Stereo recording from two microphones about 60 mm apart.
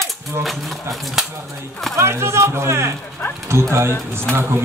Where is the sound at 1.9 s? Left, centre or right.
Right.